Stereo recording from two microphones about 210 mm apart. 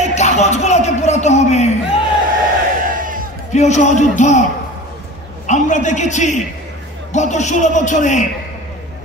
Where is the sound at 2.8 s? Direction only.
40° right (ahead or behind).